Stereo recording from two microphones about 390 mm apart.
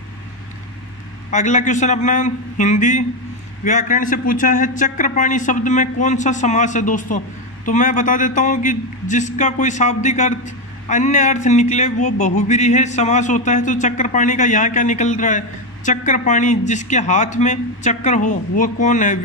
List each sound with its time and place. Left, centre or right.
1.3 s a man's voice: centre